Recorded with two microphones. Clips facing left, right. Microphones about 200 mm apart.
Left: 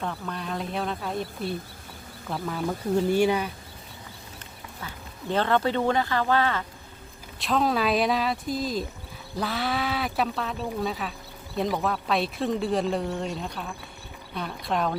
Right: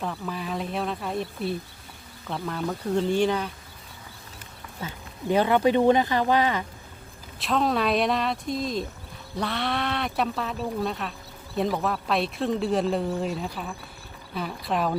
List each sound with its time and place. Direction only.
0.0 s speech: 5° right (ahead or behind)
4.8 s speech: 20° right (ahead or behind)
7.3 s speech: centre (ahead or behind)